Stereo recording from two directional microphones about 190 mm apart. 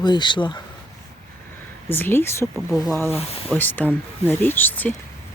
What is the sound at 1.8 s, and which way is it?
Speech, 10° left (ahead or behind).